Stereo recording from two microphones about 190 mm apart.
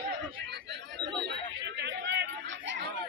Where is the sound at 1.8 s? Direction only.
65° right (ahead or behind).